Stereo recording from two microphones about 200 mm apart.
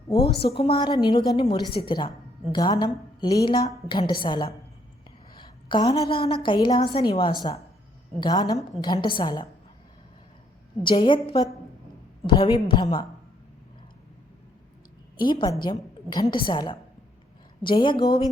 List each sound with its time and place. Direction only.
0.2 s a woman's voice: 50° left (ahead or behind)
0.5 s a woman's voice: 25° left (ahead or behind)
10.8 s a woman's voice: 25° left (ahead or behind)
15.2 s a woman's voice: 20° left (ahead or behind)